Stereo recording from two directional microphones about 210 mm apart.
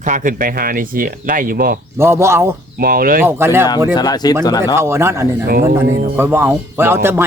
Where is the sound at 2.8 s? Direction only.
45° right (ahead or behind).